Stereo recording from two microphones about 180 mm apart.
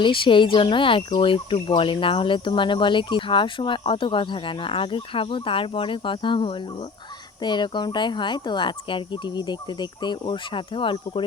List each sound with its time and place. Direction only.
0.0 s speech: 25° left (ahead or behind)